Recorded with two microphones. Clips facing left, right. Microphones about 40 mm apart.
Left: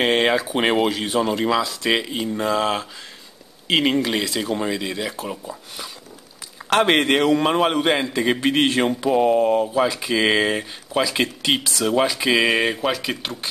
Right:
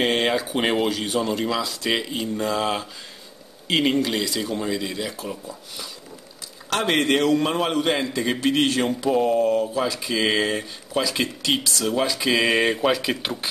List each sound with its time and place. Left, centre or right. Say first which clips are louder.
0.0 s a man's voice: left 3 dB; centre